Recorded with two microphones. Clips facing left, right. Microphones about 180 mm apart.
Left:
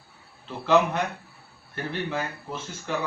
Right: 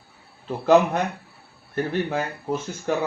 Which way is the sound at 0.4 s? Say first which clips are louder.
Right 4 dB; 45° right (ahead or behind).